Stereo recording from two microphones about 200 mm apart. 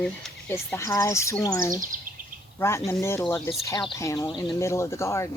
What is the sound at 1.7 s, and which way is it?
Speech, 40° right (ahead or behind).